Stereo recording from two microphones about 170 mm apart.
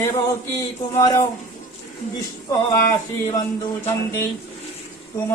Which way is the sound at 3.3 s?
15° left (ahead or behind).